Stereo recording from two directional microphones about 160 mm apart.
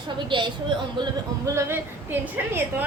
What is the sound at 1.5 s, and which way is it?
A woman's voice, 15° right (ahead or behind).